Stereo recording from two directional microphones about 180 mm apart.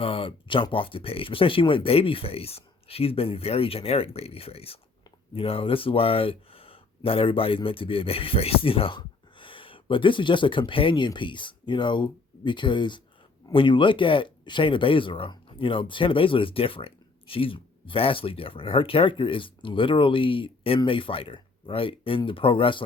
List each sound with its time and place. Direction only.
0.0 s speech: 30° left (ahead or behind)